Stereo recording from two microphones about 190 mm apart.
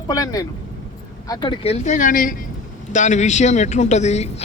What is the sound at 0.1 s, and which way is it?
A man's voice, 20° left (ahead or behind).